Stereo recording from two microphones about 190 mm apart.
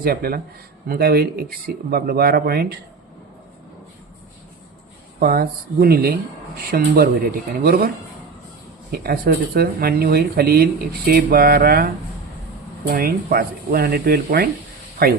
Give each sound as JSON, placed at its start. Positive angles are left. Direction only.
{"t": 0.0, "sound": "speech", "side_deg": -50}
{"t": 5.2, "sound": "speech", "side_deg": -50}
{"t": 8.9, "sound": "speech", "side_deg": -55}
{"t": 12.9, "sound": "speech", "side_deg": -50}